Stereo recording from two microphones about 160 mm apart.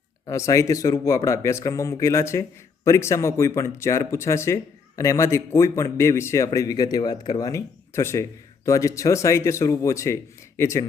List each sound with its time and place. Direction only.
0.3 s speech: 20° left (ahead or behind)